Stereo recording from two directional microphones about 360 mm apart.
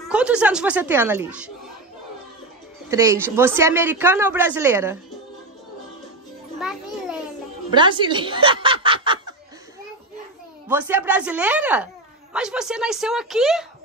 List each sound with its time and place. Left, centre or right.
0.0 s speech: centre
2.9 s speech: centre
6.6 s music: centre
7.7 s speech: centre
10.7 s speech: centre